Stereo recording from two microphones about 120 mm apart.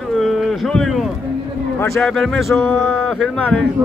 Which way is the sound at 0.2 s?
Centre (ahead or behind).